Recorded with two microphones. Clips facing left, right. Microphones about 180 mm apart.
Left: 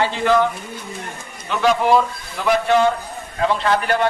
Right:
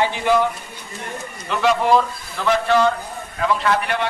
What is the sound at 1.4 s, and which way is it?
Speech, centre (ahead or behind).